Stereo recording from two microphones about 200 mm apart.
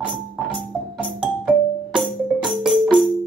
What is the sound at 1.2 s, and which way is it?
Music, 5° right (ahead or behind).